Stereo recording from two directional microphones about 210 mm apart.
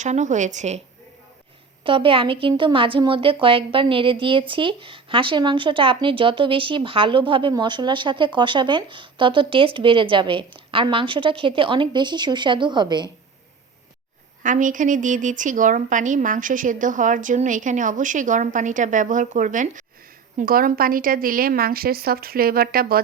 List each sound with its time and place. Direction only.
0.0 s speech: 35° right (ahead or behind)
1.8 s speech: 25° right (ahead or behind)
14.4 s a woman's voice: 40° right (ahead or behind)